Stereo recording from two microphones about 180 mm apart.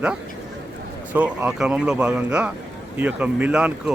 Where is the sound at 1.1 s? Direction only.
10° right (ahead or behind).